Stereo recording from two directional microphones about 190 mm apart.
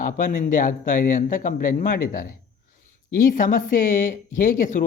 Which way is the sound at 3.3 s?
45° left (ahead or behind).